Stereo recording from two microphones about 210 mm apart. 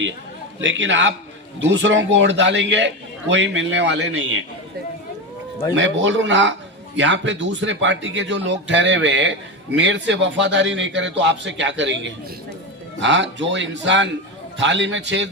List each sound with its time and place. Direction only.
0.6 s a man's voice: 60° right (ahead or behind)
5.7 s a man's voice: 60° right (ahead or behind)